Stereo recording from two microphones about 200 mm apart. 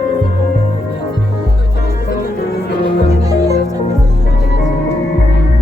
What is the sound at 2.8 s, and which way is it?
Music, 20° right (ahead or behind).